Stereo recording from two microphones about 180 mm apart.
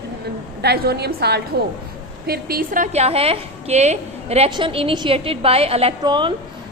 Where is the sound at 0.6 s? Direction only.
65° right (ahead or behind).